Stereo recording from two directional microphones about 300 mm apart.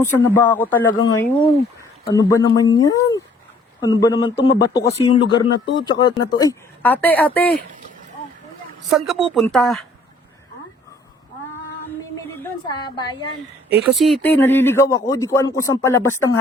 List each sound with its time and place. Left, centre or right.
0.0 s speech: centre
4.4 s speech: left
4.8 s speech: centre
8.9 s speech: centre
12.4 s a woman's voice: centre
13.9 s speech: centre